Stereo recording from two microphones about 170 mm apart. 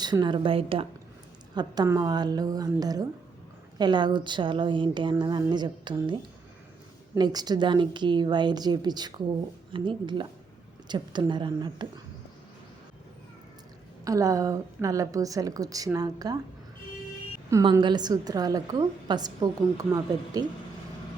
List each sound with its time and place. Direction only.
0.0 s a woman's voice: 25° right (ahead or behind)
7.2 s a woman's voice: 25° right (ahead or behind)
14.0 s a woman's voice: 20° right (ahead or behind)
17.5 s a woman's voice: 25° right (ahead or behind)